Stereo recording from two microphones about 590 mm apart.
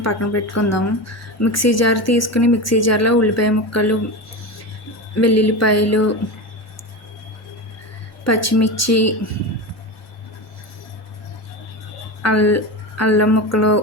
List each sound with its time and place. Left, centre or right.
0.0 s speech: left
5.2 s speech: left
8.2 s speech: left
12.2 s speech: left